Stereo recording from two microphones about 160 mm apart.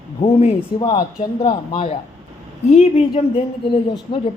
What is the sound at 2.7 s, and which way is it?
Speech, 45° left (ahead or behind).